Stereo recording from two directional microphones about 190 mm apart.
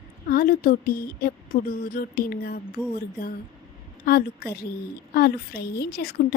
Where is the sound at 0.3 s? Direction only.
50° left (ahead or behind).